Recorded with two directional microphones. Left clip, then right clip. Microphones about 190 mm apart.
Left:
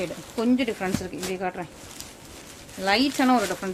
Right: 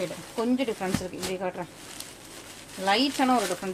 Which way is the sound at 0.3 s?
25° left (ahead or behind).